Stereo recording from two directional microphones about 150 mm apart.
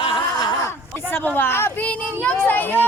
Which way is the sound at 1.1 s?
10° left (ahead or behind).